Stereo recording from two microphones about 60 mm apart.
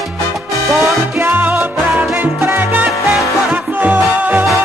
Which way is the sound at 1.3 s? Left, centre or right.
Right.